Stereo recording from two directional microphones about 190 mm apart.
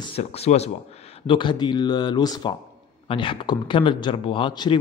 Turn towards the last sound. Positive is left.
turn(degrees=25)  # may be behind; listen again after turning